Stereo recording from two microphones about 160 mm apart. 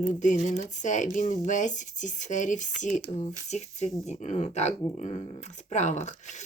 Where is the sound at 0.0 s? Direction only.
50° left (ahead or behind).